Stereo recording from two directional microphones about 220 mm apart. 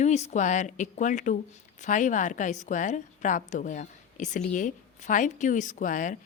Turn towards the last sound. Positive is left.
turn(degrees=35)  # may be behind; listen again after turning